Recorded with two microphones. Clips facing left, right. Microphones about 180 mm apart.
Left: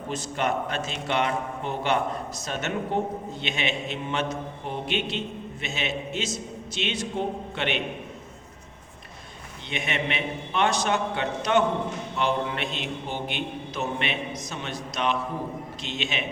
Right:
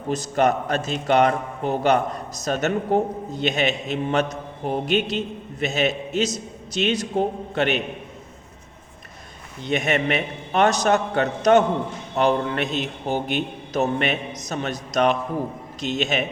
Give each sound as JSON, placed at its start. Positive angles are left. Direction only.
{"t": 0.1, "sound": "a man's voice", "side_deg": -40}
{"t": 9.6, "sound": "a man's voice", "side_deg": -45}